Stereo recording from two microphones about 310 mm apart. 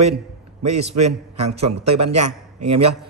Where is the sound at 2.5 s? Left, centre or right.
Right.